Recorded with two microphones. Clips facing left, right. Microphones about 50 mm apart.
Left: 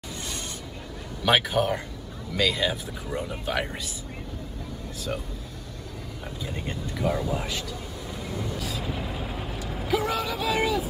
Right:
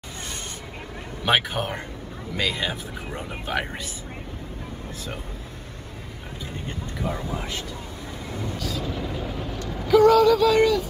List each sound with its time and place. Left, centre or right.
1.2 s speech: right
7.0 s speech: right
8.3 s vehicle: right
8.5 s vehicle: centre